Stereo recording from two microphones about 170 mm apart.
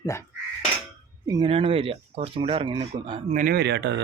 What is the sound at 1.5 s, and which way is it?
Speech, 35° right (ahead or behind).